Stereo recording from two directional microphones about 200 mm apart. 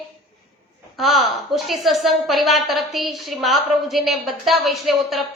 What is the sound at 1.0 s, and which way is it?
A woman's voice, centre (ahead or behind).